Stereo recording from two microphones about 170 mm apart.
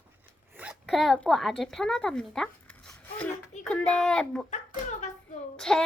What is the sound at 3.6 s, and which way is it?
Speech, 5° left (ahead or behind).